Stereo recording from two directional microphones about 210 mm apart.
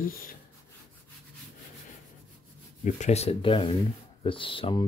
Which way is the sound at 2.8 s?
35° left (ahead or behind).